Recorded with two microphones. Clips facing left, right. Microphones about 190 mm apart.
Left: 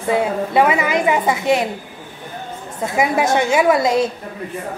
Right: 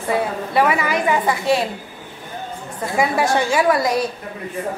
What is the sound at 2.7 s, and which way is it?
A woman's voice, 20° left (ahead or behind).